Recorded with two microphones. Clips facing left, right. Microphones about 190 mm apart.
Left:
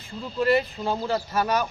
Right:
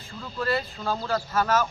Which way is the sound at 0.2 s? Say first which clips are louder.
Left 6 dB; 20° left (ahead or behind).